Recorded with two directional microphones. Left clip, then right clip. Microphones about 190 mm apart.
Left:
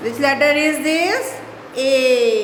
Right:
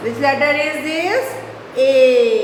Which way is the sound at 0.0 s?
55° left (ahead or behind).